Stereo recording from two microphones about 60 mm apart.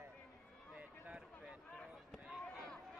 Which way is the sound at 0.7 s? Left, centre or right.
Centre.